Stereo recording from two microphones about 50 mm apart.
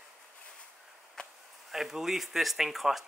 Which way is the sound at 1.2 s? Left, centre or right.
Centre.